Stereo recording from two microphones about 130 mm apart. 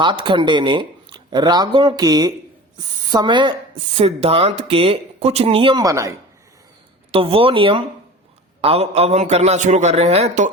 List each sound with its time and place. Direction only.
0.0 s speech: 40° right (ahead or behind)
3.9 s speech: 50° right (ahead or behind)
5.8 s speech: 25° right (ahead or behind)
7.1 s a man's voice: 45° right (ahead or behind)